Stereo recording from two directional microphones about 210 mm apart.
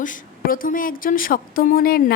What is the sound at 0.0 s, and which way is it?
A woman's voice, 40° left (ahead or behind).